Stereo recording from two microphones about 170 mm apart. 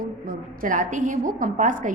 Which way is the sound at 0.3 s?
50° right (ahead or behind).